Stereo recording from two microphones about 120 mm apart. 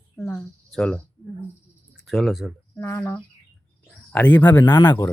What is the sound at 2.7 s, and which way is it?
Speech, 20° left (ahead or behind).